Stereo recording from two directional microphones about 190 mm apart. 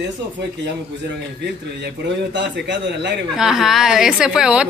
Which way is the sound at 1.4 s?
65° right (ahead or behind).